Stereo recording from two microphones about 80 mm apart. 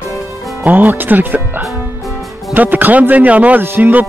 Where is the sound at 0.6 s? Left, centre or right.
Right.